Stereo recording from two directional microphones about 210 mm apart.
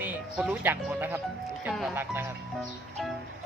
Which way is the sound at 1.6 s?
5° right (ahead or behind).